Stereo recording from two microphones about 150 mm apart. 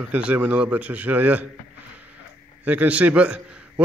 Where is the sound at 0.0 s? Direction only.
10° right (ahead or behind).